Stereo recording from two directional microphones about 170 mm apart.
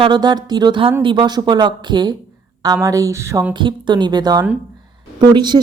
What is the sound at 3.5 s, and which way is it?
A woman's voice, 25° right (ahead or behind).